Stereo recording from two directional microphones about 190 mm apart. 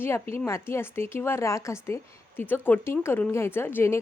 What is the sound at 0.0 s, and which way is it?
A woman's voice, 10° left (ahead or behind).